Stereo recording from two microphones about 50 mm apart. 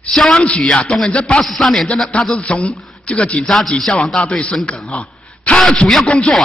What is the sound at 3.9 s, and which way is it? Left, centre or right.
Speech, centre.